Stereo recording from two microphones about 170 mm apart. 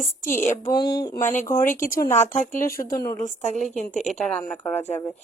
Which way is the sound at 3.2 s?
45° left (ahead or behind).